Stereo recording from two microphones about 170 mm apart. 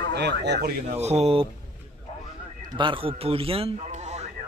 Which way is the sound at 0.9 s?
40° right (ahead or behind).